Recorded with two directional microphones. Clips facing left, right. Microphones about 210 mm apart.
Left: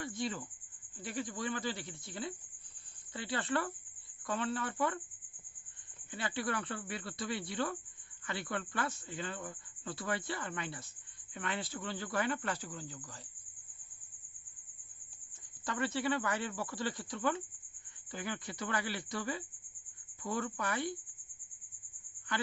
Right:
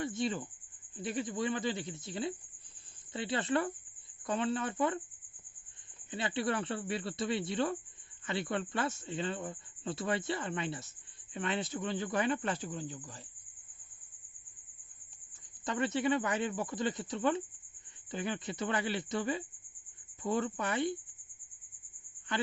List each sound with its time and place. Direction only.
0.0 s cricket: 25° right (ahead or behind)
0.9 s speech: 20° right (ahead or behind)
6.1 s speech: 20° right (ahead or behind)
15.6 s speech: 20° right (ahead or behind)